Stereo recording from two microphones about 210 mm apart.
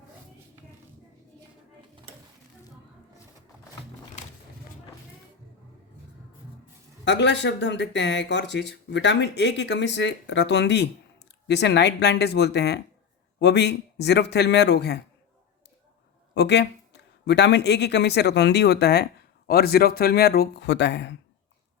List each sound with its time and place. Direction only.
7.0 s speech: 55° left (ahead or behind)
16.3 s speech: 55° left (ahead or behind)